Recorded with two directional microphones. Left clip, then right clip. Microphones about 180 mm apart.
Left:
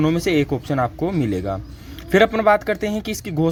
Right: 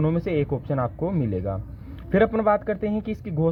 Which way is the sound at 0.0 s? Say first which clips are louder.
Left 6 dB; 15° left (ahead or behind).